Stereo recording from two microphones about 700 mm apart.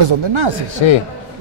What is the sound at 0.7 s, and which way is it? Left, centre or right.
Speech, left.